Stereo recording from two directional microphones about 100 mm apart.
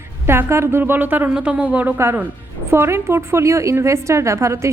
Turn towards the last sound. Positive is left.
turn(degrees=-30)  # may be behind; listen again after turning